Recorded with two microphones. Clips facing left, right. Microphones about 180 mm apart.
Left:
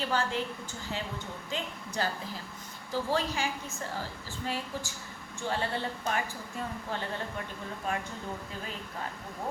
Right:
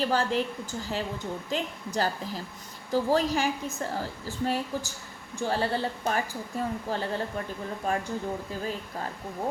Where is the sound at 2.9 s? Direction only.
40° right (ahead or behind).